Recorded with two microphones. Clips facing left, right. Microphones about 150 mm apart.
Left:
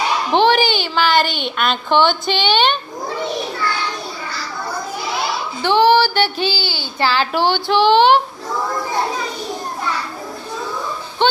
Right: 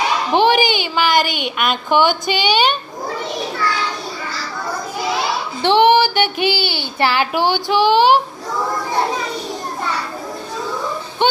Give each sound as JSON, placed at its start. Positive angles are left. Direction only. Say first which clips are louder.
{"t": 0.3, "sound": "a woman's voice", "louder": "even", "side_deg": -10}
{"t": 5.6, "sound": "child singing", "louder": "right 1 dB", "side_deg": -25}
{"t": 6.7, "sound": "a woman's voice", "louder": "right 1 dB", "side_deg": -20}
{"t": 11.2, "sound": "a sound", "louder": "even", "side_deg": -15}